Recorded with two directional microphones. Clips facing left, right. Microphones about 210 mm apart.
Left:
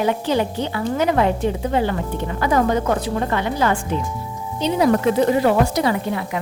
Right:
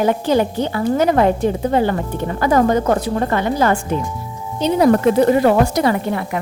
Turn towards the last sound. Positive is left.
turn(degrees=-50)  # may be behind; listen again after turning